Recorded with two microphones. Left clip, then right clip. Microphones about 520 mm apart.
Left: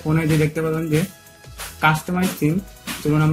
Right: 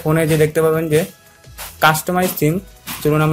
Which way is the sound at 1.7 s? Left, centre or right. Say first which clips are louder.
Right 5 dB; centre.